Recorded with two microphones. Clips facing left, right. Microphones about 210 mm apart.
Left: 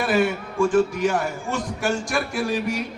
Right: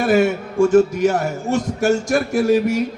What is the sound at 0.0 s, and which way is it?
A man's voice, 45° right (ahead or behind).